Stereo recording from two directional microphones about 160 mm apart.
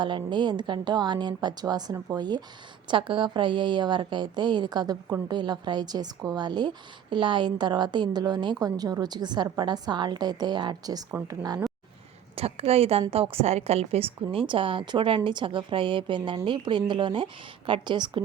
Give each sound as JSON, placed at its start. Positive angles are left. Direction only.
{"t": 0.0, "sound": "a woman's voice", "side_deg": -30}
{"t": 12.4, "sound": "a woman's voice", "side_deg": -40}